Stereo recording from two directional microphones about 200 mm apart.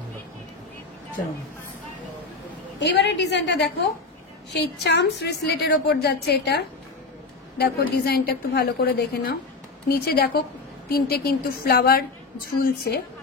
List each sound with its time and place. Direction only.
2.8 s a woman's voice: 55° left (ahead or behind)
4.6 s a woman's voice: 60° left (ahead or behind)